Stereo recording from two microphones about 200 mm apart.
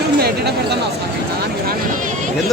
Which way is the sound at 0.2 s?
55° right (ahead or behind).